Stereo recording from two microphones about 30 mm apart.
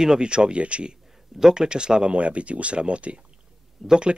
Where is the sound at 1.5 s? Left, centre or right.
Right.